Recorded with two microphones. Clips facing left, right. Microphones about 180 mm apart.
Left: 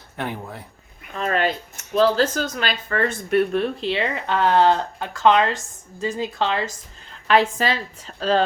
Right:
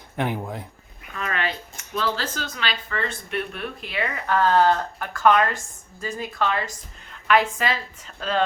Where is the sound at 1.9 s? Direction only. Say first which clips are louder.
Left 9 dB; 45° left (ahead or behind).